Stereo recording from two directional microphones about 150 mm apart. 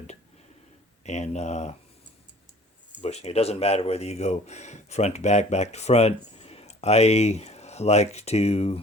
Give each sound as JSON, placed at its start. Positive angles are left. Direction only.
{"t": 1.0, "sound": "speech", "side_deg": 50}
{"t": 3.0, "sound": "speech", "side_deg": 45}